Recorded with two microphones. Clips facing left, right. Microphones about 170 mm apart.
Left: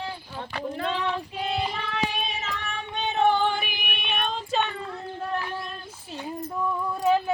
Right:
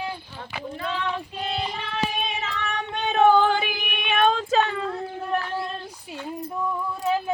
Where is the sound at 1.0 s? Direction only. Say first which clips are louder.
Left 1 dB; 5° left (ahead or behind).